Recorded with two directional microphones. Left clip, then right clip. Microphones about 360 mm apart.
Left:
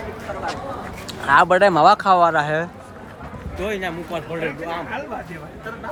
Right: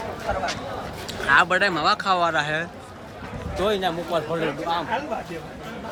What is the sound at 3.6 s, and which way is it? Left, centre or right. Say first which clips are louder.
Speech: right 2 dB; centre.